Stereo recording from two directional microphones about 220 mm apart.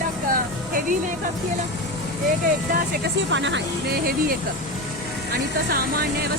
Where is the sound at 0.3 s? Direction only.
40° right (ahead or behind).